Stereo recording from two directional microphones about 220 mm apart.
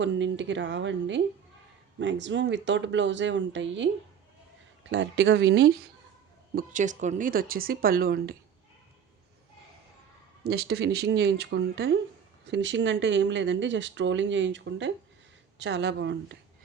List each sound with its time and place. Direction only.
0.0 s speech: 55° right (ahead or behind)
4.9 s speech: 55° right (ahead or behind)
6.6 s speech: 35° right (ahead or behind)
10.4 s speech: 45° right (ahead or behind)